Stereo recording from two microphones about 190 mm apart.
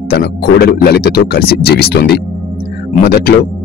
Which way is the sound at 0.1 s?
60° left (ahead or behind).